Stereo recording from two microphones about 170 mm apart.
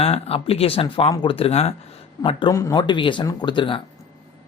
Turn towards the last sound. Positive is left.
turn(degrees=30)  # may be behind; listen again after turning